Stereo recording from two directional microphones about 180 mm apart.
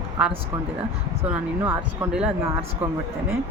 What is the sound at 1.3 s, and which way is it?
Speech, 10° right (ahead or behind).